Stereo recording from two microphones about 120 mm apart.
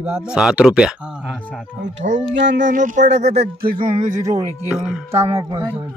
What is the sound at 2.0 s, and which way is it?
Speech, 90° right.